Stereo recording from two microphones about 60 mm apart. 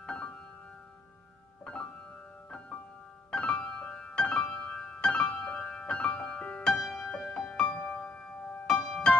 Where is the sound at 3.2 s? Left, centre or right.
Centre.